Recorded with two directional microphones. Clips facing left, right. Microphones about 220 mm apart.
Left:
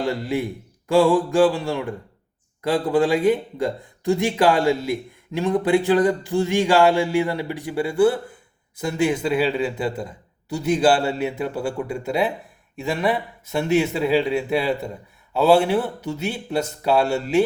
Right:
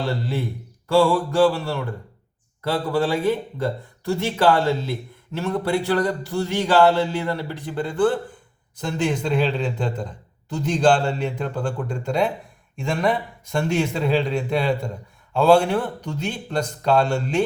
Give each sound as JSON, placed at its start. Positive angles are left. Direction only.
{"t": 0.0, "sound": "speech", "side_deg": 15}